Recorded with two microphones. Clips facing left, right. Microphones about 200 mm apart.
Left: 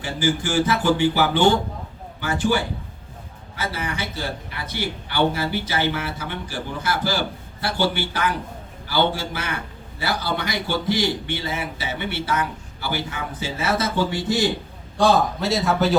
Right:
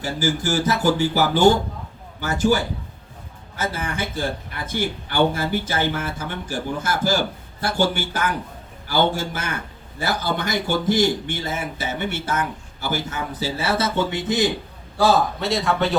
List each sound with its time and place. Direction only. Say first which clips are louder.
0.0 s a man's voice: even; 40° right (ahead or behind); by 14.5 s 20° right (ahead or behind)
14.9 s a man's voice: even; centre (ahead or behind)